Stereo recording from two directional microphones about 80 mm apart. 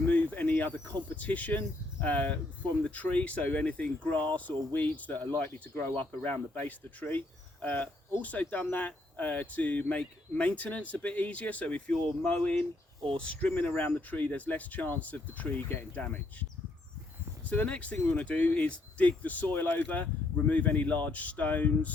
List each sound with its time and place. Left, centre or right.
0.1 s cricket: centre
1.1 s speech: centre